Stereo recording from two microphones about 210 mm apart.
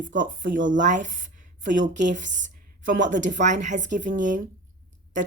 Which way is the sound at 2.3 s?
60° right (ahead or behind).